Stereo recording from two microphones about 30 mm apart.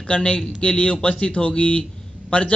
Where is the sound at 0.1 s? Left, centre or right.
Left.